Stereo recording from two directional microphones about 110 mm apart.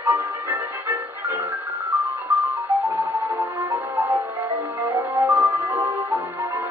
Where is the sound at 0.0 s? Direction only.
20° right (ahead or behind).